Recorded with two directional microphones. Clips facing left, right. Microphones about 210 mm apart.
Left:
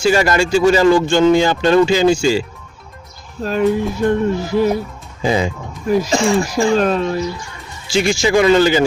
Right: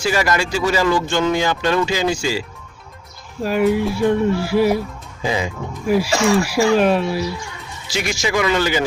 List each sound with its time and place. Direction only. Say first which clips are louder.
0.0 s speech: left 5 dB; 25° left (ahead or behind)
3.4 s speech: left 1 dB; 10° right (ahead or behind)
5.2 s speech: left 5 dB; 30° left (ahead or behind)
5.8 s speech: left 2 dB; 10° right (ahead or behind)
7.9 s speech: left 7 dB; 30° left (ahead or behind)